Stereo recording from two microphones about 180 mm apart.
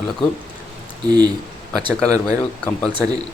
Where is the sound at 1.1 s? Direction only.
25° right (ahead or behind).